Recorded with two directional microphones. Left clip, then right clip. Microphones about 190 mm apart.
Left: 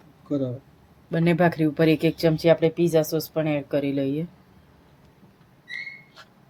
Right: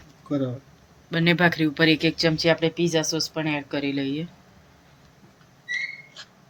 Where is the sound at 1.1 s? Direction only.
40° left (ahead or behind).